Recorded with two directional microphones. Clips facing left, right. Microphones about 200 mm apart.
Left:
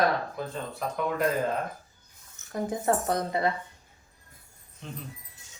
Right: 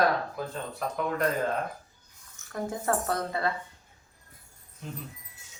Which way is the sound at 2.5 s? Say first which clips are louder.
Left 2 dB; 20° left (ahead or behind).